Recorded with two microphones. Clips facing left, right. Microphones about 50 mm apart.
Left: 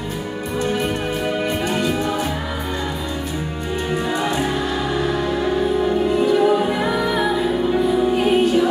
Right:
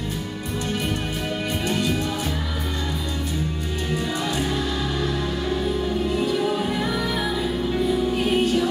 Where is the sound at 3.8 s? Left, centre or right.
Left.